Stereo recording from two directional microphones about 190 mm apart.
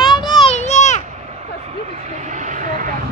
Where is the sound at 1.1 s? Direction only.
35° right (ahead or behind).